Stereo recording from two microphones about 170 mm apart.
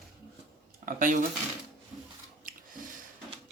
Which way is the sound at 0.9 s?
50° right (ahead or behind).